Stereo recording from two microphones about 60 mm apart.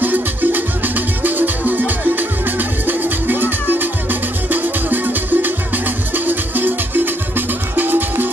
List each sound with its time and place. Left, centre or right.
0.0 s music: right